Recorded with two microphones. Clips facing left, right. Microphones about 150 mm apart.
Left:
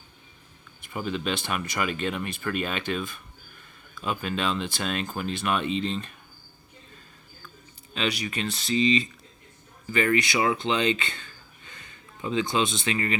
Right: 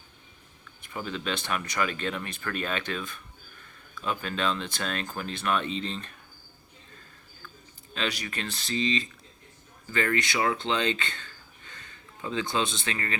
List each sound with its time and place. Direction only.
0.9 s speech: 15° left (ahead or behind)
4.0 s speech: 15° left (ahead or behind)
7.9 s speech: 15° left (ahead or behind)